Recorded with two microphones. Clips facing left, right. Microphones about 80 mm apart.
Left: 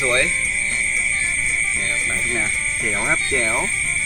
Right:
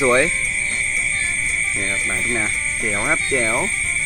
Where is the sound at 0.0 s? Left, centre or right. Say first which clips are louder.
Right 4 dB; right.